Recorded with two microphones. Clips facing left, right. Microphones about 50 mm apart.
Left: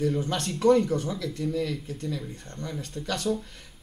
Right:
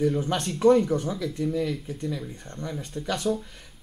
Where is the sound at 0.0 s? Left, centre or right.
Centre.